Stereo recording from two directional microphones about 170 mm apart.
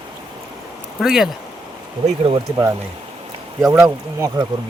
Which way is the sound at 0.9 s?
Centre (ahead or behind).